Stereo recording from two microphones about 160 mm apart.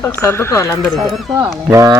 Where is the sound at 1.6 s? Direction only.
20° right (ahead or behind).